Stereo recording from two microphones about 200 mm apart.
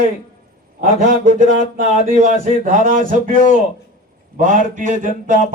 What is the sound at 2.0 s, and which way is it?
Speech, 40° right (ahead or behind).